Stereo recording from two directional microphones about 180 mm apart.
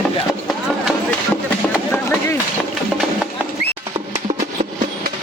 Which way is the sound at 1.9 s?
15° left (ahead or behind).